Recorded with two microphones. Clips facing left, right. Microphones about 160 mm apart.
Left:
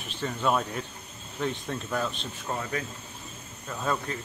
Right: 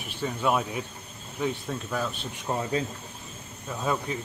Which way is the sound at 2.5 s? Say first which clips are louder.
Right 4 dB; 20° right (ahead or behind).